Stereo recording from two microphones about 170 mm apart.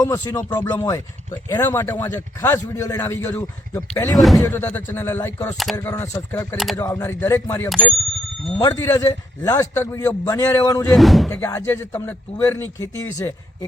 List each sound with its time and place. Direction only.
0.0 s a man's voice: 15° left (ahead or behind)
10.9 s speech: centre (ahead or behind)
11.3 s a man's voice: 15° left (ahead or behind)